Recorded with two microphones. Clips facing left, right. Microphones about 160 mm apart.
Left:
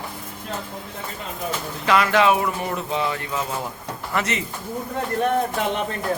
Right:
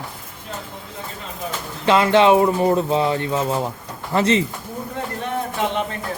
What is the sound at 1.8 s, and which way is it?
Speech, 25° right (ahead or behind).